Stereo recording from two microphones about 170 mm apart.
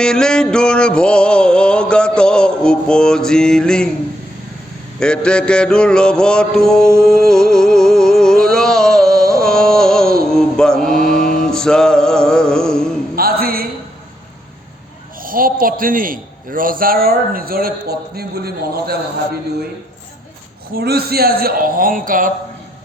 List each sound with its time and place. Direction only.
0.0 s music: 5° left (ahead or behind)
4.9 s music: 5° left (ahead or behind)
8.5 s a sound: 5° left (ahead or behind)
10.2 s mantra: 5° left (ahead or behind)
11.0 s mantra: 55° left (ahead or behind)
11.4 s music: 5° left (ahead or behind)
13.1 s a sound: 60° right (ahead or behind)
15.2 s a man's voice: 55° right (ahead or behind)
20.7 s a man's voice: 65° right (ahead or behind)